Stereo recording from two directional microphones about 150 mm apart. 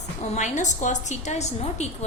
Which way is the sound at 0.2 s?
55° left (ahead or behind).